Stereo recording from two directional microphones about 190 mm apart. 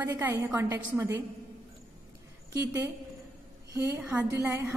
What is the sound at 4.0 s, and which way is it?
Speech, 10° right (ahead or behind).